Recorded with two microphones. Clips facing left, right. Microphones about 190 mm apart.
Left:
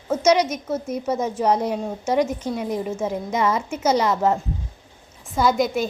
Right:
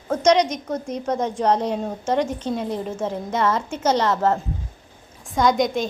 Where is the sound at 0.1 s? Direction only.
5° left (ahead or behind).